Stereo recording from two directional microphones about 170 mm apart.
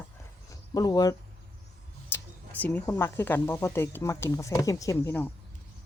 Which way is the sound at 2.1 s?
10° left (ahead or behind).